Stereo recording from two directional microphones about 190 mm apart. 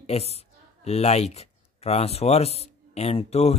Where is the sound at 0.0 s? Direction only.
35° left (ahead or behind).